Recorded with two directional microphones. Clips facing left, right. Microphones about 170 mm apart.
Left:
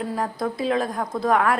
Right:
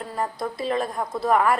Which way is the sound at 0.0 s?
Centre (ahead or behind).